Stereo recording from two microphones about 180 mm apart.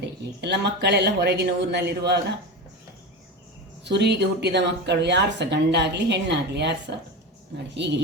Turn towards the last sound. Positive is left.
turn(degrees=-75)  # may be behind; listen again after turning